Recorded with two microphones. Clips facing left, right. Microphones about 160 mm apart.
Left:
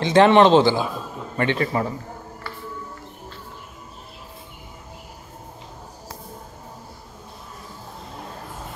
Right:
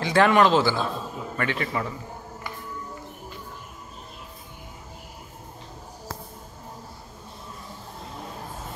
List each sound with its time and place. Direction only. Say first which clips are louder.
0.0 s a man's voice: left 5 dB; 25° left (ahead or behind)